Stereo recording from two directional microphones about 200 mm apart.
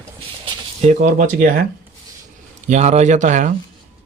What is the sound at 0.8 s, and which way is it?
Speech, 35° right (ahead or behind).